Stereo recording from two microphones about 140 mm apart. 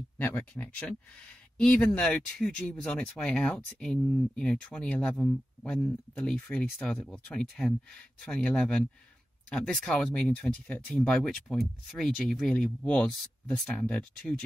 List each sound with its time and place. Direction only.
0.2 s speech: 10° left (ahead or behind)